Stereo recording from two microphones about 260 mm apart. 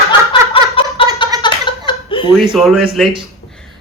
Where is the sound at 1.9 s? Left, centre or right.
Centre.